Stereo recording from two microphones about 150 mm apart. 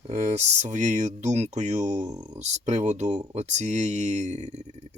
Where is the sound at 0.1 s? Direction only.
50° right (ahead or behind).